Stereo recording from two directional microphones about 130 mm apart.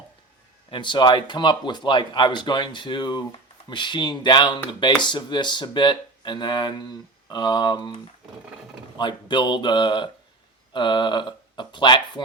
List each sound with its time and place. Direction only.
0.7 s speech: 35° left (ahead or behind)